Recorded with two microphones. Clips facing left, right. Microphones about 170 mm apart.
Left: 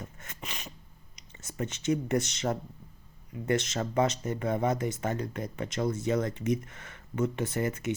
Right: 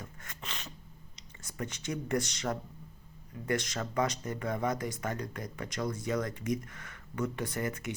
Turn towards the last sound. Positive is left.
turn(degrees=25)  # may be behind; listen again after turning